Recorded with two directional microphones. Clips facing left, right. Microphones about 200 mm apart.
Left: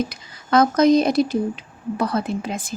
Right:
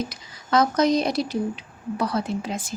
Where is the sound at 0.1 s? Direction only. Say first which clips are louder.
Left 3 dB; 55° left (ahead or behind).